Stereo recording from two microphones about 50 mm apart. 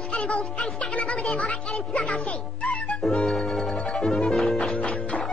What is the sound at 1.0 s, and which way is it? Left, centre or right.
Music, left.